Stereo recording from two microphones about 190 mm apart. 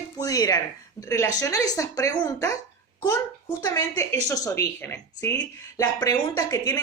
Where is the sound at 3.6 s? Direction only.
20° left (ahead or behind).